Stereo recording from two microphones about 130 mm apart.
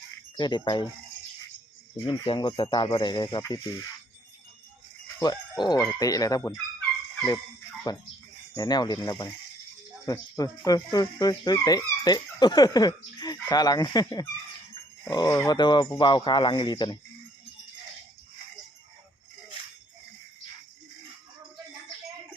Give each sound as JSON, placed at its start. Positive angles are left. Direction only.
{"t": 0.3, "sound": "speech", "side_deg": 35}
{"t": 2.0, "sound": "speech", "side_deg": 40}
{"t": 5.2, "sound": "speech", "side_deg": 30}
{"t": 7.9, "sound": "speech", "side_deg": 30}